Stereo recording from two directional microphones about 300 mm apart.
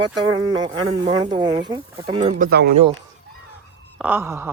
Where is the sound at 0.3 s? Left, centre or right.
Centre; by 2.6 s right.